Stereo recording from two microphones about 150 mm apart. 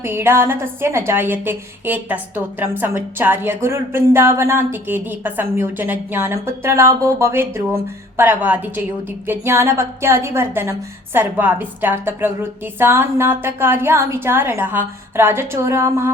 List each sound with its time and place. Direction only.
0.0 s a woman's voice: 15° right (ahead or behind)